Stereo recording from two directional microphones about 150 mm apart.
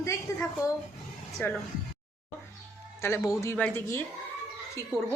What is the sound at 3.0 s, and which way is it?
A woman's voice, 20° left (ahead or behind).